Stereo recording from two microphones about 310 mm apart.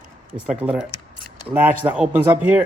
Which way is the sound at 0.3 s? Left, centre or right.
Centre.